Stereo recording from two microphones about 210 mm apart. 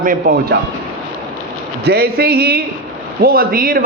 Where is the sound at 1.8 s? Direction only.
50° right (ahead or behind).